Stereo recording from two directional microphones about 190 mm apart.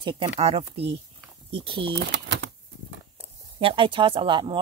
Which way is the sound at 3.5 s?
30° right (ahead or behind).